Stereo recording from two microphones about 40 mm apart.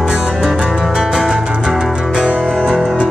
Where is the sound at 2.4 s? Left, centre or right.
Centre.